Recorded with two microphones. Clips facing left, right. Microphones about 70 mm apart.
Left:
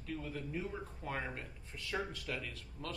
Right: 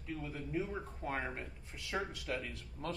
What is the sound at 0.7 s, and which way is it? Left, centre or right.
A man's voice, right.